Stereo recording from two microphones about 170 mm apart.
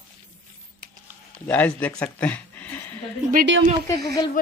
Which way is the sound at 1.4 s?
10° left (ahead or behind).